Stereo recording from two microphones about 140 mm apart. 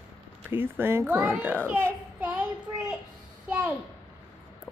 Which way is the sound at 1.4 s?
15° right (ahead or behind).